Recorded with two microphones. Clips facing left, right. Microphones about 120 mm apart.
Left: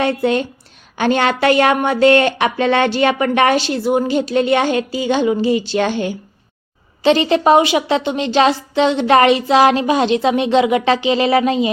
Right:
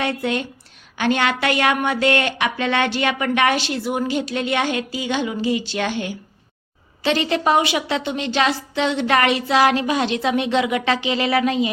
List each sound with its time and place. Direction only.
0.0 s a woman's voice: 35° left (ahead or behind)